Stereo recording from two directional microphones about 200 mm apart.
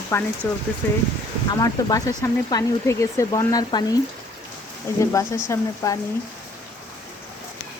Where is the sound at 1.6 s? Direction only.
15° left (ahead or behind).